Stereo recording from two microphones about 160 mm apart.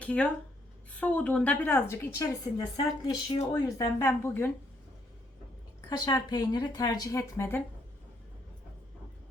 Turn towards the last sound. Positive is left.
turn(degrees=15)  # may be behind; listen again after turning